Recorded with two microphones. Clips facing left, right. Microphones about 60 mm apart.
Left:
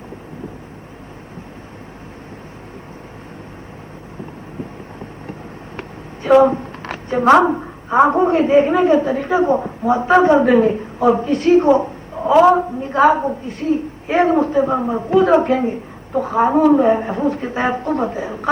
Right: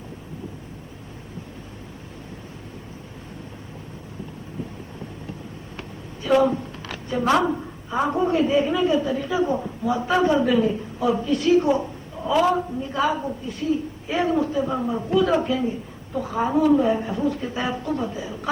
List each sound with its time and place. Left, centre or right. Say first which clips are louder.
6.2 s a woman's voice: left 7 dB; left